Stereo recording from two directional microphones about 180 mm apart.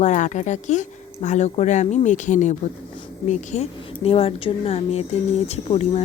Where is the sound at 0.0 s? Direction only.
40° left (ahead or behind).